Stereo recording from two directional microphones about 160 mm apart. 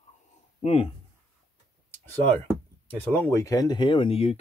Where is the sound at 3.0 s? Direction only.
10° left (ahead or behind); by 4.4 s 40° left (ahead or behind).